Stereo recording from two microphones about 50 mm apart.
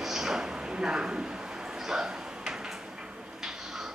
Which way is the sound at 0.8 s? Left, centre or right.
Centre.